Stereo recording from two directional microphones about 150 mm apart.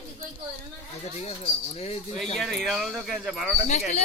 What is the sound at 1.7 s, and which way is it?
Speech, 45° left (ahead or behind).